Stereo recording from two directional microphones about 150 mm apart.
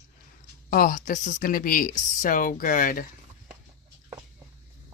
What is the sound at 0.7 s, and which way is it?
Speech, 65° left (ahead or behind).